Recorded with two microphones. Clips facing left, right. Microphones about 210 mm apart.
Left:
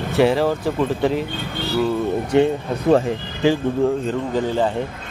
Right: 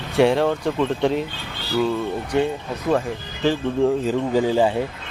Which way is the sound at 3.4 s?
15° left (ahead or behind).